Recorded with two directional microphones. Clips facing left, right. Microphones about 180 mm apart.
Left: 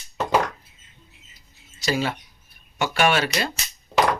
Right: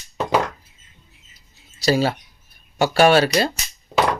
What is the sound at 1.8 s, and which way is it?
Speech, 35° right (ahead or behind).